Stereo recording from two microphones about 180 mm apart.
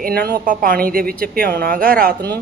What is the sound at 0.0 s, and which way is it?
A woman's voice, 60° right (ahead or behind).